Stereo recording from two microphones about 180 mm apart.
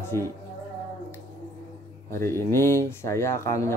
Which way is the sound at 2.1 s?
15° left (ahead or behind).